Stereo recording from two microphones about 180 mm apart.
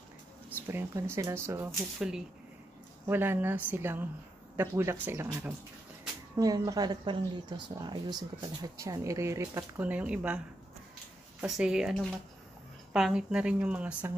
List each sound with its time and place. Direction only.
0.5 s speech: 15° right (ahead or behind)
2.0 s speech: 5° right (ahead or behind)
11.4 s speech: 5° right (ahead or behind)